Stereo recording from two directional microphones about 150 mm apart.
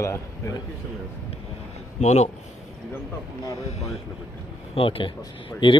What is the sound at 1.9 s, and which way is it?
Speech, 50° left (ahead or behind).